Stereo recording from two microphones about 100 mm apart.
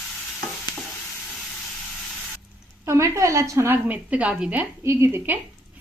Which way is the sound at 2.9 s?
30° right (ahead or behind).